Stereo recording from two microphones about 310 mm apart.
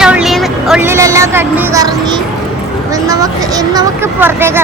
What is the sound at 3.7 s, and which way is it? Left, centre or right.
Vehicle, centre.